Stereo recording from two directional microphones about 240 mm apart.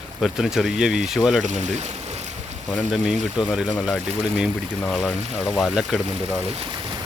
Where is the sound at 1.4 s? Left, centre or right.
Right.